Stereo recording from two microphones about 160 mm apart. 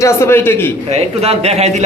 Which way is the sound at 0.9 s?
40° right (ahead or behind).